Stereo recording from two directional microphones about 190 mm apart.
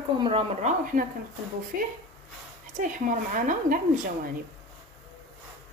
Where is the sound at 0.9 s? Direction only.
45° right (ahead or behind).